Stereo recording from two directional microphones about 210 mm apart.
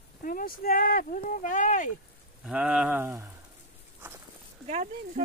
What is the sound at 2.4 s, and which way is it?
Speech, 5° right (ahead or behind).